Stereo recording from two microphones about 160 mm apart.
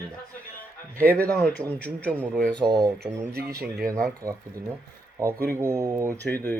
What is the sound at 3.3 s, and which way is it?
Speech, 75° right (ahead or behind).